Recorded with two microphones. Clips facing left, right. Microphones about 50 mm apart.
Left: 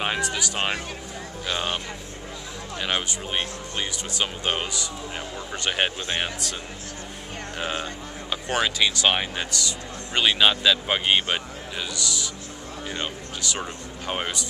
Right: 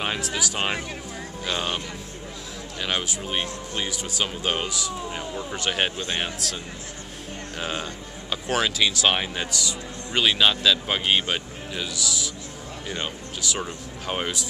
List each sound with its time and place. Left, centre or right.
0.0 s speech: centre
2.8 s speech: centre
5.9 s speech: centre
6.2 s speech: centre